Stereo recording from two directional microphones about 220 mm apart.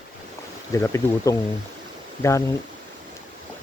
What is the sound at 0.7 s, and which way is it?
Speech, 15° left (ahead or behind).